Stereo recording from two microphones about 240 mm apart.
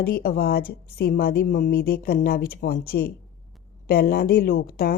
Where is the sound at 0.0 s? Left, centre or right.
Left.